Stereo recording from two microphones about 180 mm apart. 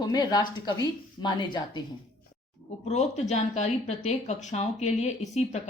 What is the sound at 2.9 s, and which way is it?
Speech, 40° left (ahead or behind).